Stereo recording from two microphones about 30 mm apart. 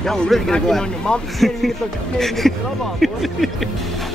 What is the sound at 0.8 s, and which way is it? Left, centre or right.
Speech, left.